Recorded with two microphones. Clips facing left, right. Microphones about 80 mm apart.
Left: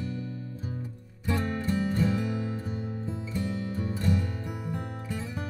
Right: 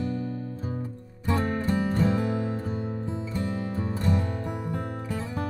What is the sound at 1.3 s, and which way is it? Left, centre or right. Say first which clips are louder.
Music: right 3 dB; right.